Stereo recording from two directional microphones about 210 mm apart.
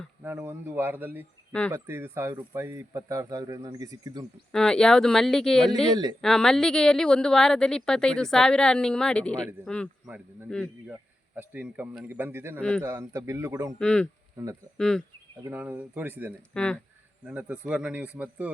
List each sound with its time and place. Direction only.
0.2 s speech: 10° right (ahead or behind)
4.5 s a woman's voice: 5° left (ahead or behind)
5.9 s speech: 20° right (ahead or behind)
6.2 s a woman's voice: centre (ahead or behind)
11.3 s speech: 5° right (ahead or behind)
12.5 s a woman's voice: 5° left (ahead or behind)
12.8 s speech: 15° right (ahead or behind)
13.7 s a woman's voice: 5° left (ahead or behind)
15.4 s speech: 10° right (ahead or behind)
16.6 s a woman's voice: 5° left (ahead or behind)